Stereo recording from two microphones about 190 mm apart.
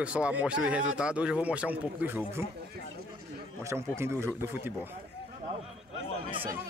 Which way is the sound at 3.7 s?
15° right (ahead or behind).